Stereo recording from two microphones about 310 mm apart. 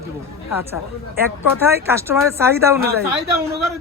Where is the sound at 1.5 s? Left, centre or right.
Centre.